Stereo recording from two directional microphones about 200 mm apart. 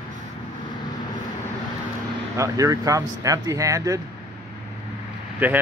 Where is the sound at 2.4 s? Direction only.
15° right (ahead or behind).